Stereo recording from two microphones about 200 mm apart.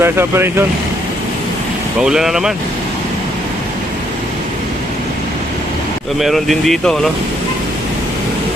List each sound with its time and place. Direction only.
0.0 s speech: 10° right (ahead or behind)
2.0 s speech: 5° right (ahead or behind)
6.1 s speech: centre (ahead or behind)